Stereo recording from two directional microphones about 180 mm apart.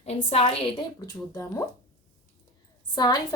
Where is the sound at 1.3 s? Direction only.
15° left (ahead or behind).